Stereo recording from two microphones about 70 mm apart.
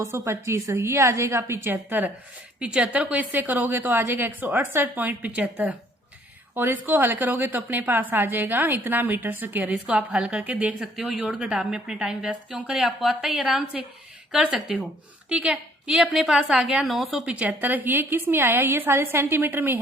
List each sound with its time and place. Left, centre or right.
0.0 s a woman's voice: right
1.7 s a woman's voice: right
2.6 s a woman's voice: centre
6.5 s a woman's voice: right; by 14.8 s centre
15.3 s a woman's voice: centre
17.2 s a woman's voice: centre